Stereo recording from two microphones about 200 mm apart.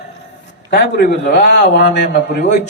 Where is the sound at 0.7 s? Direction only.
55° left (ahead or behind).